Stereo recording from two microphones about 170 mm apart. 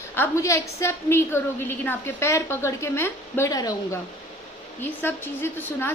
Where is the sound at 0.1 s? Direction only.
15° left (ahead or behind).